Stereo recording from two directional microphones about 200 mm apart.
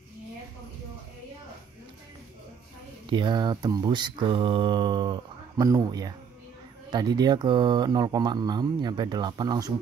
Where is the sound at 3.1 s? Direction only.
25° right (ahead or behind).